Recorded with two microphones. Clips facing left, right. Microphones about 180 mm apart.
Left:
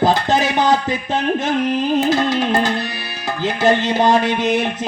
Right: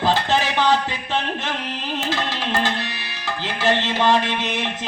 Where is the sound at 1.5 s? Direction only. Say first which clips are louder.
Left 11 dB; 45° left (ahead or behind).